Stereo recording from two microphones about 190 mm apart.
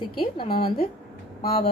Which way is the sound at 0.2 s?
25° left (ahead or behind).